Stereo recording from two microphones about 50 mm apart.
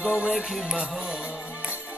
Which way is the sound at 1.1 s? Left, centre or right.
Centre.